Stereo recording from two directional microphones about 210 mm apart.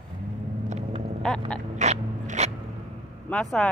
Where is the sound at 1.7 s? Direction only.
35° right (ahead or behind).